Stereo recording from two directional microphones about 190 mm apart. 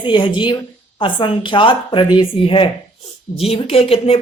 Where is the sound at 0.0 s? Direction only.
25° left (ahead or behind).